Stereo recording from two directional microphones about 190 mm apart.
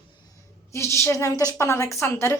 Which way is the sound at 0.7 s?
15° left (ahead or behind).